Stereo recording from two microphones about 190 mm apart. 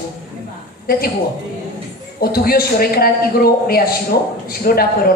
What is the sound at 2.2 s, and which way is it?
A woman's voice, 50° left (ahead or behind).